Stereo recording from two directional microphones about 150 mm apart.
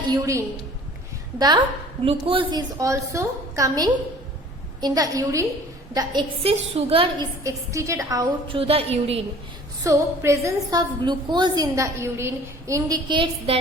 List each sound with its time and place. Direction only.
0.1 s a woman's voice: 20° right (ahead or behind)
6.4 s a woman's voice: 45° right (ahead or behind)
7.4 s a woman's voice: 20° right (ahead or behind)
8.4 s a woman's voice: 40° right (ahead or behind)
9.8 s a woman's voice: 20° right (ahead or behind)